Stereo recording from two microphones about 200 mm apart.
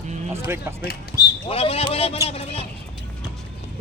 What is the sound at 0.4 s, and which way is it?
Speech, 10° right (ahead or behind).